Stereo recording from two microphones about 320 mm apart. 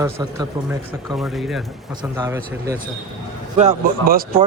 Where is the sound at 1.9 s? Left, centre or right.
Centre.